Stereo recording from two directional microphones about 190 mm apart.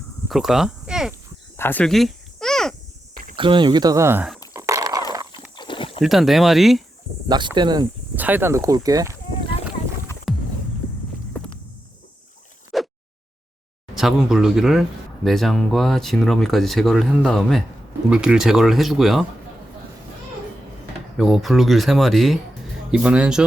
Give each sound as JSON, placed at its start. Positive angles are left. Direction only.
{"t": 0.3, "sound": "speech", "side_deg": 0}
{"t": 1.5, "sound": "cricket", "side_deg": 10}
{"t": 3.3, "sound": "speech", "side_deg": -25}
{"t": 4.5, "sound": "a sound", "side_deg": -15}
{"t": 5.1, "sound": "horse", "side_deg": -20}
{"t": 5.5, "sound": "clip-clop", "side_deg": 25}
{"t": 6.0, "sound": "speech", "side_deg": 0}
{"t": 7.3, "sound": "speech", "side_deg": -25}
{"t": 8.1, "sound": "speech", "side_deg": -10}
{"t": 12.7, "sound": "a sound", "side_deg": 0}
{"t": 13.9, "sound": "speech", "side_deg": 0}
{"t": 21.2, "sound": "speech", "side_deg": 0}